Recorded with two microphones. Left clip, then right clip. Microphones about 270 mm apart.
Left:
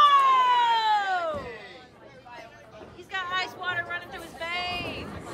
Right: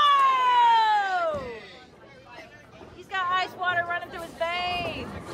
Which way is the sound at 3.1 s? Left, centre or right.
Centre.